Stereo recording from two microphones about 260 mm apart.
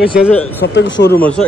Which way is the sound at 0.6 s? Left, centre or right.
Left.